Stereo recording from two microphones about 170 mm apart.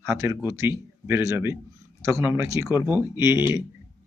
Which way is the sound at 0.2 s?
15° right (ahead or behind).